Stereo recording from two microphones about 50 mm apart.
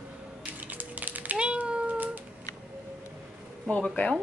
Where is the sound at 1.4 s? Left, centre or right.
Right.